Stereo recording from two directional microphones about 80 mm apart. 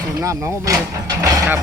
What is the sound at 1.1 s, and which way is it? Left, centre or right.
Speech, right.